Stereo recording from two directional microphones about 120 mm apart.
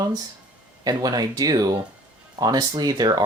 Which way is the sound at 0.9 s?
35° right (ahead or behind).